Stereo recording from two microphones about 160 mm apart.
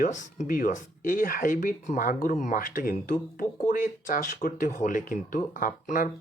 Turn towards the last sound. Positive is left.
turn(degrees=50)  # may be behind; listen again after turning